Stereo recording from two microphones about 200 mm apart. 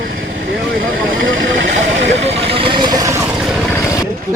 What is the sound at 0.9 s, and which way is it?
Vehicle, 75° right (ahead or behind).